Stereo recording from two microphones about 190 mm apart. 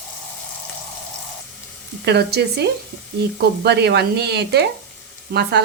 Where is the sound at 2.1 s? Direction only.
60° right (ahead or behind).